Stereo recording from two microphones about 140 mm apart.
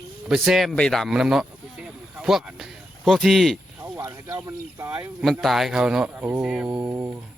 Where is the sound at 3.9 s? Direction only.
20° right (ahead or behind).